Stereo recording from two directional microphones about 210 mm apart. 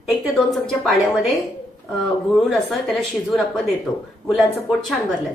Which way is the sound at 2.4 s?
Centre (ahead or behind).